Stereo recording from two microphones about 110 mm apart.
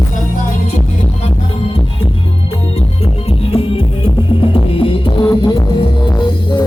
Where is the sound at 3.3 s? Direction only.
60° left (ahead or behind).